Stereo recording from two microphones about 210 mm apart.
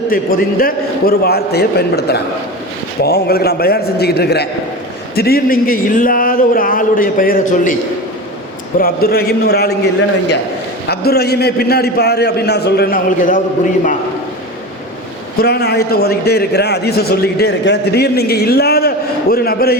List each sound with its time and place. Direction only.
0.1 s a man's voice: 45° left (ahead or behind)
8.8 s a man's voice: 45° left (ahead or behind)
10.8 s a man's voice: 50° left (ahead or behind)
15.4 s a man's voice: 50° left (ahead or behind)